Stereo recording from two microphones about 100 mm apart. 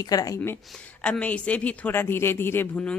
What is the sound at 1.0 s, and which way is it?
Speech, 15° left (ahead or behind).